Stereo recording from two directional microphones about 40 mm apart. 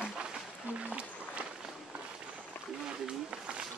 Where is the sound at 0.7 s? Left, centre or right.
Right.